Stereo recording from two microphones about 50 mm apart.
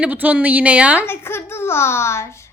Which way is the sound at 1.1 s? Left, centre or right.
Left.